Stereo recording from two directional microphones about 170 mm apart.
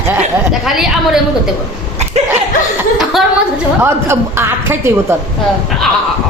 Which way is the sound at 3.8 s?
15° right (ahead or behind).